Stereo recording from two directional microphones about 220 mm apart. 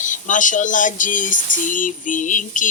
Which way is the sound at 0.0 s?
35° left (ahead or behind).